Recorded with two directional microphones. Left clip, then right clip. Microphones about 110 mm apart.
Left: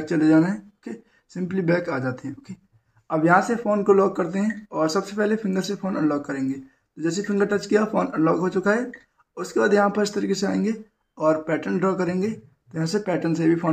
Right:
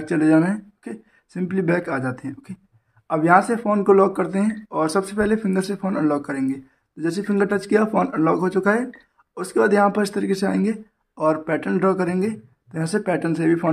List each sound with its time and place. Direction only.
0.1 s speech: 40° right (ahead or behind)